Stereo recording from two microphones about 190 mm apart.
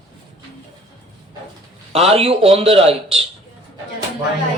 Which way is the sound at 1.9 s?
30° right (ahead or behind).